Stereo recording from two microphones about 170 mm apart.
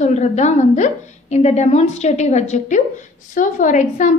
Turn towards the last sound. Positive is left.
turn(degrees=50)  # may be behind; listen again after turning